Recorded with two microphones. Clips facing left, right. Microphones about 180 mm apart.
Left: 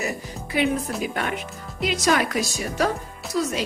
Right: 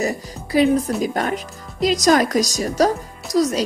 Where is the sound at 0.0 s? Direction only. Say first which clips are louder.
Right 5 dB; 35° right (ahead or behind).